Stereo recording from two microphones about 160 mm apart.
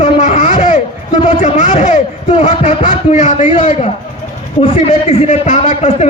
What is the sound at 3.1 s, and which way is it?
A man's voice, 50° left (ahead or behind).